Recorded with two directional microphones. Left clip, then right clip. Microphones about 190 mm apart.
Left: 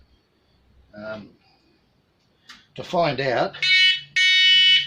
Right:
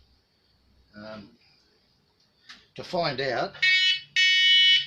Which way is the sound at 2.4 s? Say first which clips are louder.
Left 4 dB; 15° left (ahead or behind).